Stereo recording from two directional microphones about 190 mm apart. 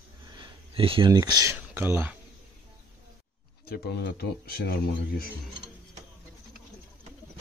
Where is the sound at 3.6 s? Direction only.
55° left (ahead or behind).